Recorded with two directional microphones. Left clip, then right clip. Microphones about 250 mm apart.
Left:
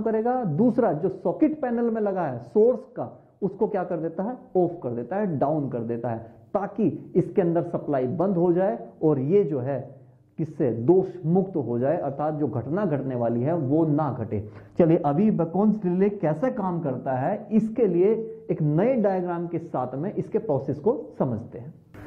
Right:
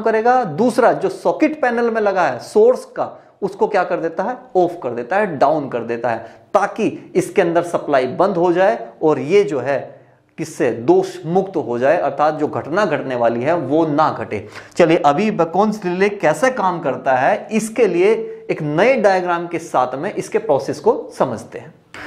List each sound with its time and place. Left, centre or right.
0.0 s speech: centre
2.5 s speech: right
3.7 s speech: centre